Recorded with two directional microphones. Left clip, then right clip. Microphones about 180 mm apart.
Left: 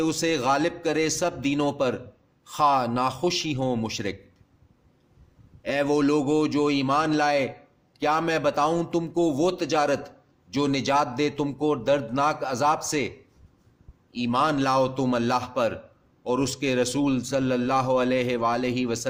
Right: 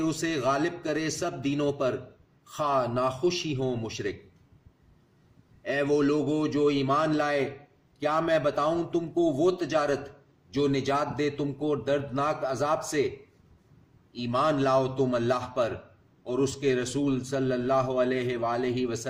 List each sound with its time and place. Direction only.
0.0 s a man's voice: 50° left (ahead or behind)
5.6 s a man's voice: 50° left (ahead or behind)
14.1 s a man's voice: 50° left (ahead or behind)